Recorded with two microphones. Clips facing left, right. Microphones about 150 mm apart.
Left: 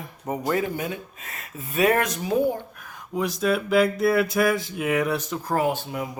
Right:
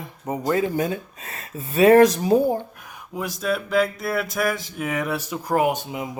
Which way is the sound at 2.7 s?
15° right (ahead or behind).